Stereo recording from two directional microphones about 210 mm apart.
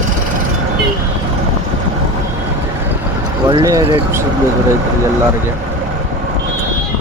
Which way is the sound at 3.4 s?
20° right (ahead or behind).